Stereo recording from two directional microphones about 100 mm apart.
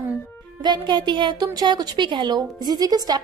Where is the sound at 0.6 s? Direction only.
50° right (ahead or behind).